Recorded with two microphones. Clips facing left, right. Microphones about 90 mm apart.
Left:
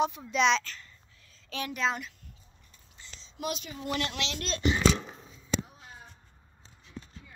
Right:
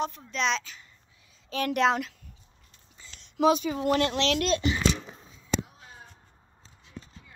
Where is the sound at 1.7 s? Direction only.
75° right (ahead or behind).